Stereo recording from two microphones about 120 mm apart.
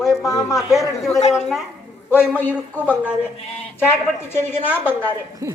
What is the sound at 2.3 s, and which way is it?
Speech, 15° left (ahead or behind).